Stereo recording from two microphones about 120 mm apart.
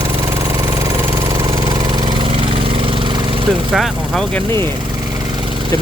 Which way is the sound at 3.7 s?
Centre (ahead or behind).